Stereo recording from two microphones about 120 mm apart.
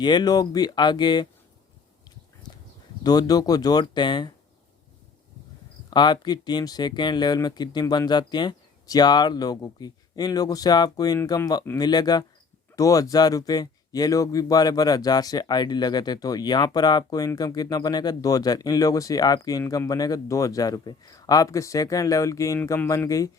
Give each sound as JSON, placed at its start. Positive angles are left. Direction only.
{"t": 0.0, "sound": "speech", "side_deg": 35}
{"t": 3.0, "sound": "speech", "side_deg": 35}
{"t": 5.9, "sound": "speech", "side_deg": 40}